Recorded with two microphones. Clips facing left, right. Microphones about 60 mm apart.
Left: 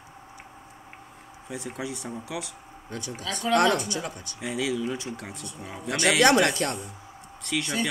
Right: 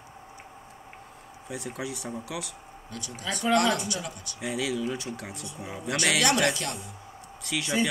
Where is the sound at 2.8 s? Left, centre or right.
Left.